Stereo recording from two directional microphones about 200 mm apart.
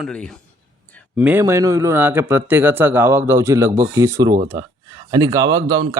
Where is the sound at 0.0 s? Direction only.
5° left (ahead or behind).